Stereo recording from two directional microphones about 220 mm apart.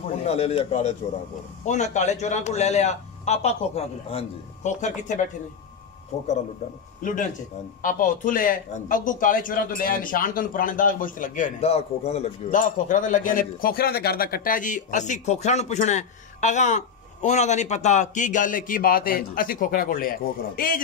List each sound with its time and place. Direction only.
0.1 s a man's voice: 30° left (ahead or behind)